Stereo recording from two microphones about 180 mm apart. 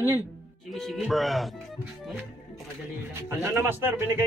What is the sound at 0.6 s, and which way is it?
Speech, centre (ahead or behind).